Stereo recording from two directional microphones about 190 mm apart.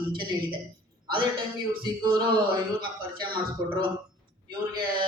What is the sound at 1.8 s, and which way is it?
Speech, 25° right (ahead or behind).